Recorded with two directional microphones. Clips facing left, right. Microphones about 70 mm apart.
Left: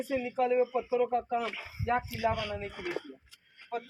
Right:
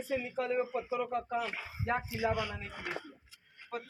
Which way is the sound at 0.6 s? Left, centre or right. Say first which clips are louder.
Left 6 dB; right.